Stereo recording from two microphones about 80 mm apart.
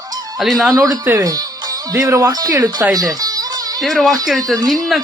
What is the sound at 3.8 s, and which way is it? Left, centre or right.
Speech, centre.